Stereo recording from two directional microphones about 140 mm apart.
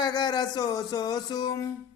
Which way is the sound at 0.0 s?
30° left (ahead or behind).